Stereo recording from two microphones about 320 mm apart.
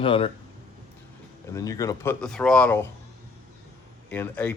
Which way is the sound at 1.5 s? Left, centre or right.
Centre.